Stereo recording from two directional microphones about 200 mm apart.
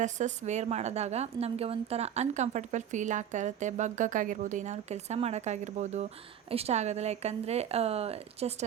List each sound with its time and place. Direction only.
0.0 s a woman's voice: 35° right (ahead or behind)